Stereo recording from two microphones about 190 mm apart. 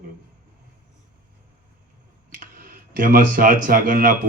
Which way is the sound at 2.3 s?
45° right (ahead or behind).